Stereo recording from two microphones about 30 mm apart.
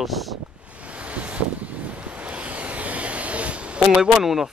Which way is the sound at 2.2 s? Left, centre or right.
Right.